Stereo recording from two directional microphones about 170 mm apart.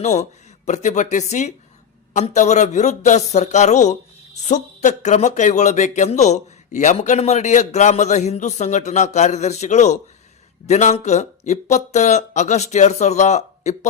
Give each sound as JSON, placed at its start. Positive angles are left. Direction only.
{"t": 0.0, "sound": "speech", "side_deg": 45}